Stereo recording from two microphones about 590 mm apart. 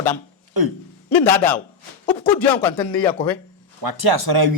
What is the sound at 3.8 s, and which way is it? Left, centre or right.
Speech, right.